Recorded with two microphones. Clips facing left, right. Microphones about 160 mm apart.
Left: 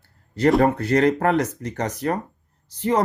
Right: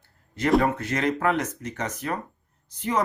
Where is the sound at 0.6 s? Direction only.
35° left (ahead or behind).